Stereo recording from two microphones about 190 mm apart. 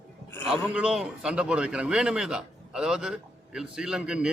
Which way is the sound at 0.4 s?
Centre (ahead or behind).